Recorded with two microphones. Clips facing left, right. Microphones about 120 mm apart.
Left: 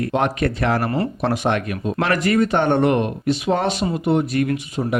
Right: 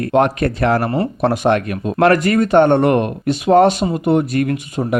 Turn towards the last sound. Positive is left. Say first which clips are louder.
# right 2 dB
turn(degrees=-50)  # may be behind; listen again after turning